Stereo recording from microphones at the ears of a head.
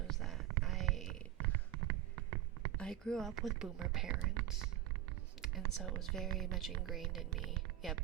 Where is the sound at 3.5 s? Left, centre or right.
Right.